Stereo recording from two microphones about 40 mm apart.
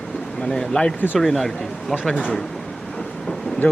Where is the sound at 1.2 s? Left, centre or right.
Centre.